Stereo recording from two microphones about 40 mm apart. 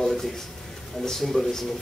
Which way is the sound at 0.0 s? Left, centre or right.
Centre.